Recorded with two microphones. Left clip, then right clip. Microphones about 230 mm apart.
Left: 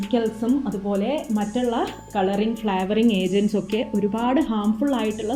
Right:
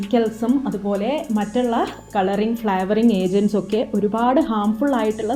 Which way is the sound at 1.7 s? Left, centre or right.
Right.